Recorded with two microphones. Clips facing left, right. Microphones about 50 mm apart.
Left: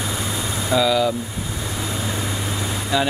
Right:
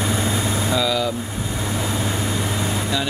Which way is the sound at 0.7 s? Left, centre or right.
Centre.